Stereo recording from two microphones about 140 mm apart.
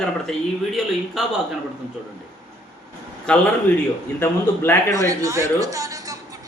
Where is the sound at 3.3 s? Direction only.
5° left (ahead or behind).